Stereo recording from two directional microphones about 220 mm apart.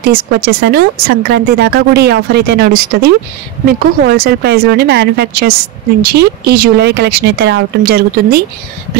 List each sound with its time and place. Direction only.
0.0 s speech: 45° right (ahead or behind)